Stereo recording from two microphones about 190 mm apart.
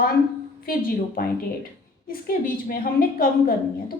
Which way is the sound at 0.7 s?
50° left (ahead or behind).